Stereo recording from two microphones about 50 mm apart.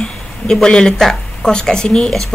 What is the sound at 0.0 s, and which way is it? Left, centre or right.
Speech, centre.